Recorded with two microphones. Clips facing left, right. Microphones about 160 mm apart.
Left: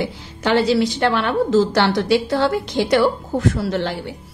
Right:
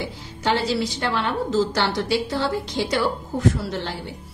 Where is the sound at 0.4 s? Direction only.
75° left (ahead or behind).